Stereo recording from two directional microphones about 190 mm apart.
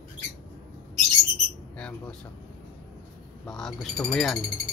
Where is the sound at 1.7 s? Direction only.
5° left (ahead or behind).